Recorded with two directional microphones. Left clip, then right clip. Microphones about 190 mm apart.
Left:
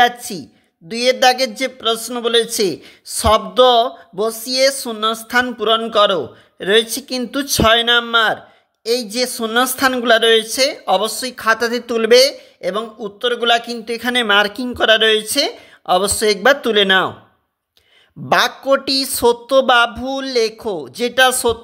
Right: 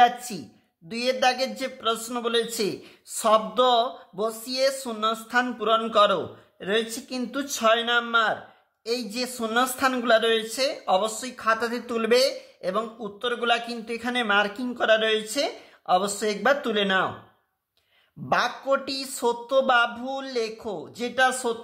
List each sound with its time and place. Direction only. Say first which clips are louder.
0.3 s speech: left 8 dB; 35° left (ahead or behind)
18.3 s speech: left 9 dB; 40° left (ahead or behind)